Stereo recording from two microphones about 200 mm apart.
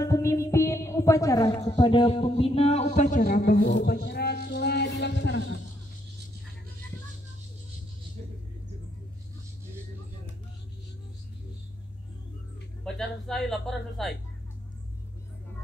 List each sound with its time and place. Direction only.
0.0 s music: 15° left (ahead or behind); by 5.5 s 60° left (ahead or behind)
12.8 s speech: centre (ahead or behind)